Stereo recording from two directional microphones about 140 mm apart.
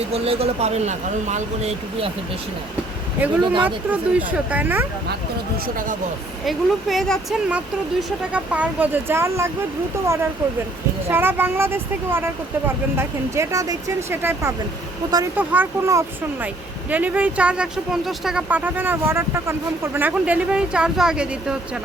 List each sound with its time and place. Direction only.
0.1 s speech: 45° right (ahead or behind)
3.4 s speech: 35° right (ahead or behind)
3.8 s speech: 10° right (ahead or behind)
6.4 s speech: centre (ahead or behind); by 9.5 s 20° right (ahead or behind)
11.1 s speech: 15° right (ahead or behind)